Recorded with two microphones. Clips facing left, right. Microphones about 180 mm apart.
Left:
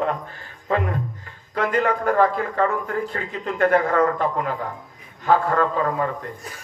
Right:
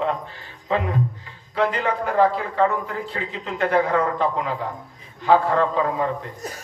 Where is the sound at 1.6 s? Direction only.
50° left (ahead or behind).